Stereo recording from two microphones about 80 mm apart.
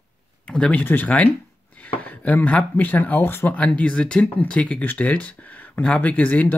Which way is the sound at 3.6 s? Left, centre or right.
Centre.